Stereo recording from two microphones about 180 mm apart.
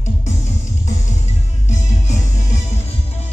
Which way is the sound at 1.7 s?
40° left (ahead or behind).